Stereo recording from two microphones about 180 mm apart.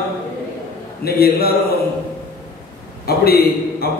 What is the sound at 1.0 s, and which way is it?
Speech, 60° left (ahead or behind).